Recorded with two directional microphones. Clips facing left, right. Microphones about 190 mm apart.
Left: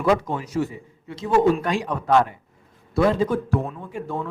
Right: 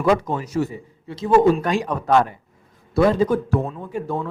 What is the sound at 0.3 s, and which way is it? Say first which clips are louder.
A man's voice: right 2 dB; 40° right (ahead or behind).